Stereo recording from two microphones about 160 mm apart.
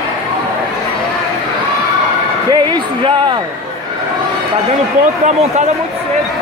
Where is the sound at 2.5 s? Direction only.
25° right (ahead or behind).